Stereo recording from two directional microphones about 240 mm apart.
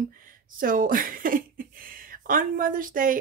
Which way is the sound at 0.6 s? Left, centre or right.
Right.